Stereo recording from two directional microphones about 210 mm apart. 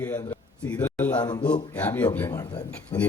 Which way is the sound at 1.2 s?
20° left (ahead or behind).